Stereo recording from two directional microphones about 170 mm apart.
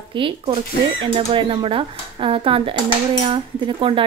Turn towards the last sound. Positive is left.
turn(degrees=-30)  # may be behind; listen again after turning